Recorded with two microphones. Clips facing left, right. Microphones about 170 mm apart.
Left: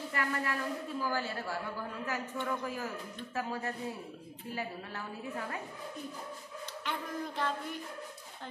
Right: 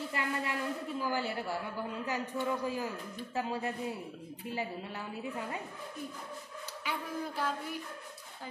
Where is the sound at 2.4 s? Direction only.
20° right (ahead or behind).